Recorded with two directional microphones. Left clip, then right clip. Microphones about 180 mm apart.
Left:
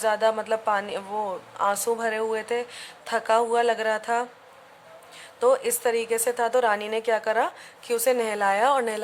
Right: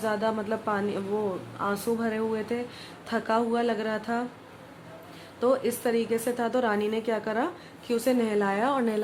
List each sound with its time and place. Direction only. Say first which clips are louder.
0.0 s a woman's voice: left 5 dB; 35° left (ahead or behind)
5.4 s a woman's voice: left 4 dB; 40° left (ahead or behind)